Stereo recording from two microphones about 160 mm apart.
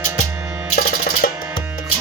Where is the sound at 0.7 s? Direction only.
70° left (ahead or behind).